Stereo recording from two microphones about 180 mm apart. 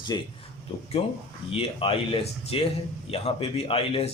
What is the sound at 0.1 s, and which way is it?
Speech, 20° left (ahead or behind).